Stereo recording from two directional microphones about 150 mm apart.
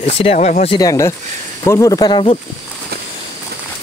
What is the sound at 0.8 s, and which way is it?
Speech, 20° left (ahead or behind).